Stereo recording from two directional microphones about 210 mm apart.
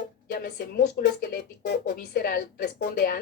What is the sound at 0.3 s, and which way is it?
A woman's voice, 50° left (ahead or behind).